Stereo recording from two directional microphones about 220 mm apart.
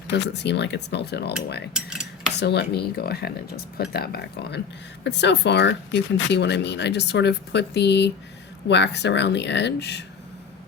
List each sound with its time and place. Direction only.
0.1 s speech: 50° left (ahead or behind)
1.7 s cutlery: 5° right (ahead or behind)
2.3 s speech: 50° left (ahead or behind)